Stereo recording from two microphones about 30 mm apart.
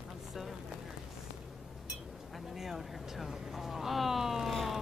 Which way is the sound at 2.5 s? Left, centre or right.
Centre.